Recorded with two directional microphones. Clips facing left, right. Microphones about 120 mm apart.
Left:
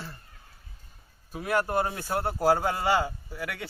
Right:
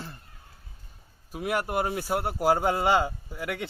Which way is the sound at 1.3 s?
15° right (ahead or behind).